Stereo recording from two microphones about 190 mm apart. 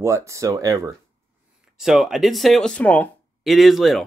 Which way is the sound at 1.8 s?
Centre (ahead or behind).